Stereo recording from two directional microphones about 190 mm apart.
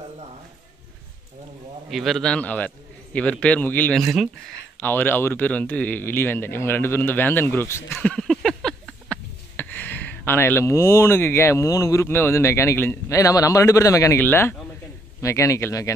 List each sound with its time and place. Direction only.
1.9 s speech: centre (ahead or behind); by 15.9 s 15° left (ahead or behind)